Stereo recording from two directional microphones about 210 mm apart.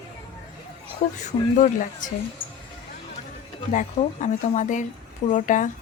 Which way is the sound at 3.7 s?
35° left (ahead or behind).